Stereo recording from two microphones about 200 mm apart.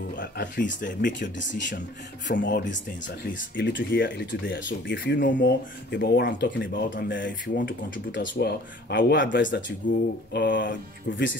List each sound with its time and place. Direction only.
0.2 s speech: 45° left (ahead or behind)
2.2 s speech: 55° left (ahead or behind)
3.5 s speech: 60° left (ahead or behind)